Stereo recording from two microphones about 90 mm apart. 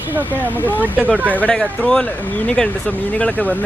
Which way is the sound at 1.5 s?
10° left (ahead or behind).